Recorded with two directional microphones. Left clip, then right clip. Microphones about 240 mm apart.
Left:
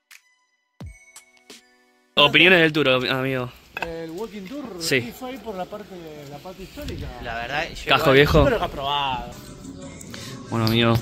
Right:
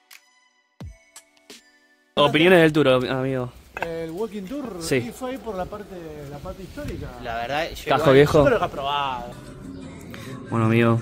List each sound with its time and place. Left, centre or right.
0.7 s music: centre
2.1 s speech: centre
3.9 s speech: right
4.7 s speech: centre
7.2 s speech: right
7.9 s speech: centre
8.5 s a man's voice: left
10.1 s a sound: centre